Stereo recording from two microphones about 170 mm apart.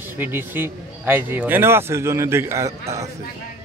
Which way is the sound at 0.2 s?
10° right (ahead or behind).